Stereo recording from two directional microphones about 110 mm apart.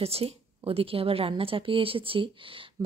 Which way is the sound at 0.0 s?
65° right (ahead or behind).